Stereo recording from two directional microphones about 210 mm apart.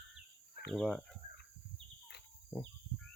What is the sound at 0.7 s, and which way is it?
Speech, centre (ahead or behind).